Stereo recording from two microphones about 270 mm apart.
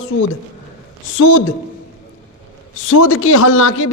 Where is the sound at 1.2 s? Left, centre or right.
Left.